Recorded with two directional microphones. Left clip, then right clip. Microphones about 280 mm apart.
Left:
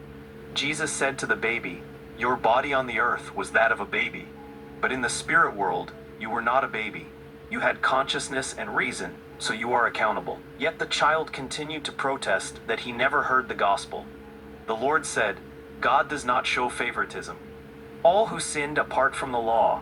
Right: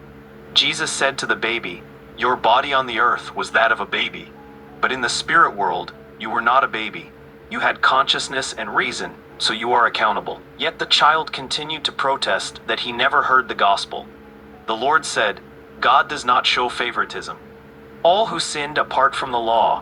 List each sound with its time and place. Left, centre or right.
0.5 s speech: right